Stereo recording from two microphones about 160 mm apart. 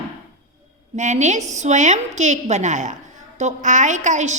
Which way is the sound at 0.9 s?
50° right (ahead or behind).